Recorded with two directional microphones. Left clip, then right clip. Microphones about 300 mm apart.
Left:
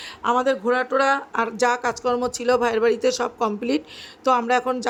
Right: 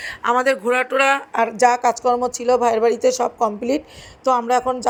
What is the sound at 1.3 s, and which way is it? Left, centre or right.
A woman's voice, centre.